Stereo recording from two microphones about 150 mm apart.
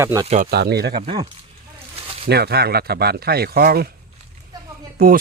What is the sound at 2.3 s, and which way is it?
Speech, 90° right.